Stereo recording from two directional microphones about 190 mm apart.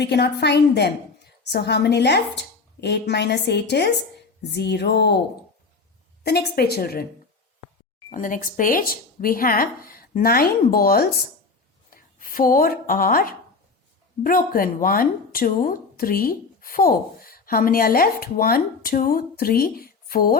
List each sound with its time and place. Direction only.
0.0 s a woman's voice: 60° left (ahead or behind)
6.2 s a woman's voice: 55° left (ahead or behind)
8.1 s speech: 45° left (ahead or behind)